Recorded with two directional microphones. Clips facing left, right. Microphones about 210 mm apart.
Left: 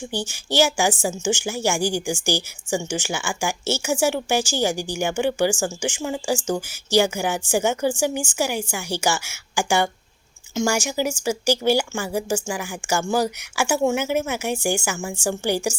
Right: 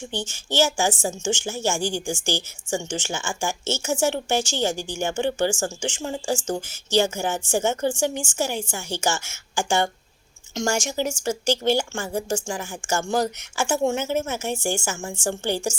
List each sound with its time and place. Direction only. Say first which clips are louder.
0.3 s a woman's voice: left 2 dB; 10° left (ahead or behind)